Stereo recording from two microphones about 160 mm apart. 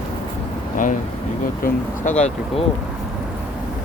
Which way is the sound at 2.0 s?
45° left (ahead or behind).